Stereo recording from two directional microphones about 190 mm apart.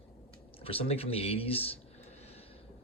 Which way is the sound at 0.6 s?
30° left (ahead or behind).